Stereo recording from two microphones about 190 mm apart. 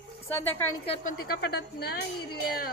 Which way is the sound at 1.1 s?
60° left (ahead or behind).